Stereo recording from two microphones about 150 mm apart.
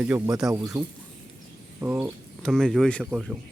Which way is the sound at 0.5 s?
20° right (ahead or behind).